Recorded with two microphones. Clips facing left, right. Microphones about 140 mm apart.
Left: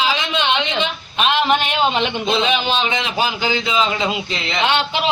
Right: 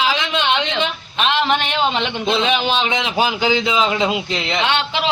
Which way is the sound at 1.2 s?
10° left (ahead or behind).